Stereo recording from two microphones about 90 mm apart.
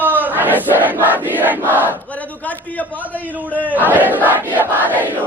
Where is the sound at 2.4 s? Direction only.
15° left (ahead or behind).